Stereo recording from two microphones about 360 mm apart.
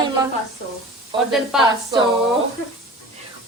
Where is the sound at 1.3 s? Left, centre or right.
Centre.